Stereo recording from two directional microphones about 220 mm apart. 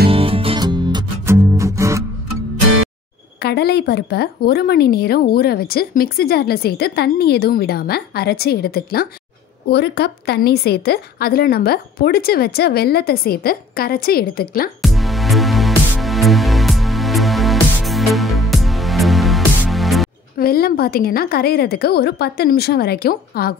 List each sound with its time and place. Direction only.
0.1 s music: 25° right (ahead or behind)
3.3 s a woman's voice: 45° left (ahead or behind)
14.8 s music: centre (ahead or behind)
20.3 s a woman's voice: 45° left (ahead or behind)